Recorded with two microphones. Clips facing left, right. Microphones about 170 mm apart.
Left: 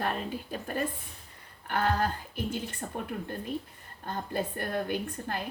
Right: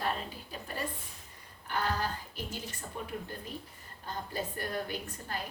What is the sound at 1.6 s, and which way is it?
Speech, 55° left (ahead or behind).